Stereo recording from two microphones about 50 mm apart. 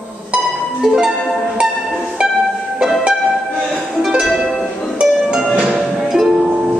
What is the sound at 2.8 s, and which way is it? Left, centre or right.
Music, centre.